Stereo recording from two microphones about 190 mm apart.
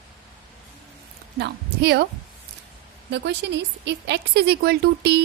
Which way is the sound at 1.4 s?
60° right (ahead or behind).